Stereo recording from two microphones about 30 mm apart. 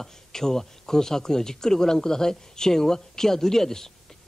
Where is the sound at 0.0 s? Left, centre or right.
Centre.